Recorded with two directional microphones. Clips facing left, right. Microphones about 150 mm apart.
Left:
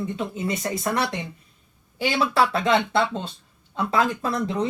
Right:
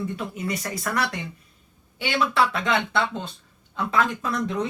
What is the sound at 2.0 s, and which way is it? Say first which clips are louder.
Speech: left 2 dB; 35° left (ahead or behind).